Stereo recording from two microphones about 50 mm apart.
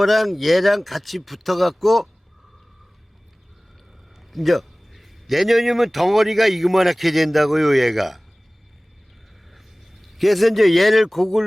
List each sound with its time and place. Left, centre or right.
0.0 s a man's voice: centre
4.3 s a man's voice: centre
9.5 s a man's voice: centre